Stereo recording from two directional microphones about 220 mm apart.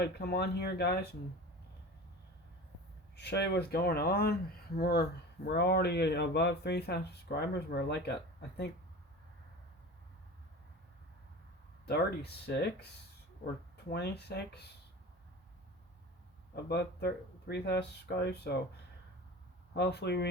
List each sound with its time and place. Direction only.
0.0 s speech: 50° left (ahead or behind)
3.2 s speech: 50° left (ahead or behind)
11.9 s speech: 50° left (ahead or behind)
13.9 s speech: 50° left (ahead or behind)
16.6 s speech: 50° left (ahead or behind)
19.7 s speech: 50° left (ahead or behind)